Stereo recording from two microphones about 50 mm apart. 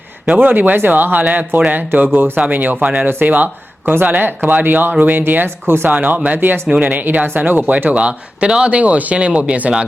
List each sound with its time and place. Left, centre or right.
0.3 s speech: right
2.3 s speech: right
7.9 s speech: right